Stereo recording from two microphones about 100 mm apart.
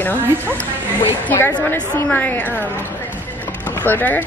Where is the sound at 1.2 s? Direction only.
20° left (ahead or behind).